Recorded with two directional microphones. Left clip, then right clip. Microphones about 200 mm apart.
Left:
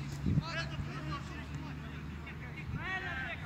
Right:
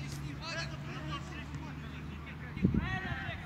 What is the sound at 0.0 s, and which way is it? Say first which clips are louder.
Vehicle: left 3 dB; 45° right (ahead or behind).